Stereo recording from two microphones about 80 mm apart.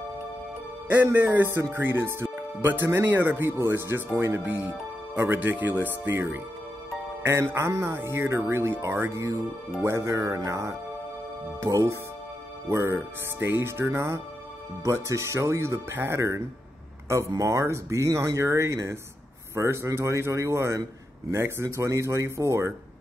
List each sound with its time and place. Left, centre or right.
0.8 s speech: right